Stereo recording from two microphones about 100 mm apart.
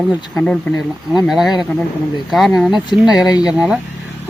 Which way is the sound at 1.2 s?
5° right (ahead or behind).